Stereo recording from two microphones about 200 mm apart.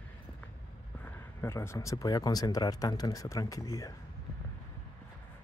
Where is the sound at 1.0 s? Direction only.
15° left (ahead or behind).